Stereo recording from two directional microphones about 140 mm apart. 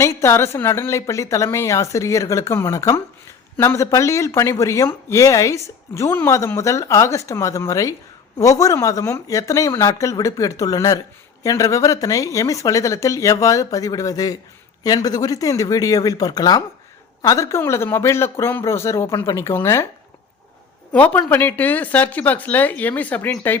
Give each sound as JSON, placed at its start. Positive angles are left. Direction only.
{"t": 0.0, "sound": "a woman's voice", "side_deg": 20}
{"t": 20.9, "sound": "speech", "side_deg": 10}